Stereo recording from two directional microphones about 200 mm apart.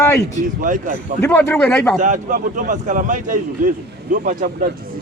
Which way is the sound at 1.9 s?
40° right (ahead or behind).